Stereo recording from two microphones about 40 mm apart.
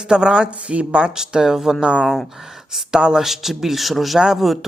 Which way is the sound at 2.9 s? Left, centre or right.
Centre.